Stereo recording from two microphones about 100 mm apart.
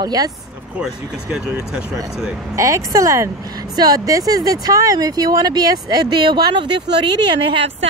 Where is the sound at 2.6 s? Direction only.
30° right (ahead or behind); by 7.3 s 50° right (ahead or behind).